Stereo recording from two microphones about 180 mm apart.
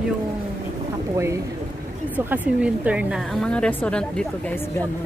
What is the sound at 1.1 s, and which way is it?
Speech, 15° right (ahead or behind).